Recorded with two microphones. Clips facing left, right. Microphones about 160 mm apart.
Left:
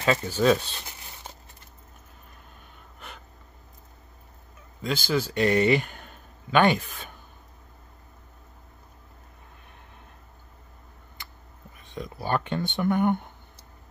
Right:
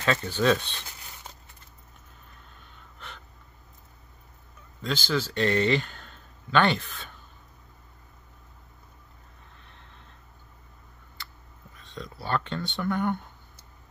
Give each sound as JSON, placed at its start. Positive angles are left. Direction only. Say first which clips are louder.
{"t": 0.0, "sound": "speech", "louder": "left 2 dB", "side_deg": 10}
{"t": 4.8, "sound": "a man's voice", "louder": "left 2 dB", "side_deg": 10}
{"t": 11.8, "sound": "speech", "louder": "left 4 dB", "side_deg": 15}